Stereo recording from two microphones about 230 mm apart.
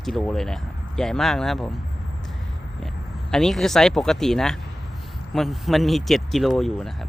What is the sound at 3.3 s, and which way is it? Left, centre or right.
Speech, centre.